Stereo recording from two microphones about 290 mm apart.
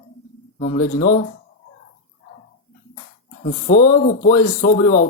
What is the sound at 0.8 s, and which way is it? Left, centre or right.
Speech, left.